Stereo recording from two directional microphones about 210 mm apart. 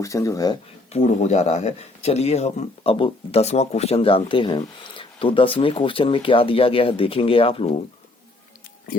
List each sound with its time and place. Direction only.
0.0 s speech: 15° left (ahead or behind)
0.9 s speech: 35° left (ahead or behind)